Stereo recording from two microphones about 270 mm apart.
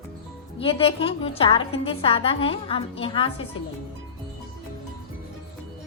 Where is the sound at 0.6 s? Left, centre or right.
Left.